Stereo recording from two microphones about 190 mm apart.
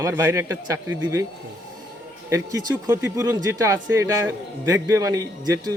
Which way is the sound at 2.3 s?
20° right (ahead or behind).